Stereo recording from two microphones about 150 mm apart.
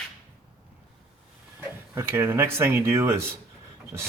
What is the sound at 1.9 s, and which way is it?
Speech, 15° right (ahead or behind).